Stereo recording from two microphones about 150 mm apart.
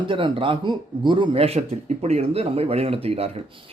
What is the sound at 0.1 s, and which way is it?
Speech, 35° right (ahead or behind).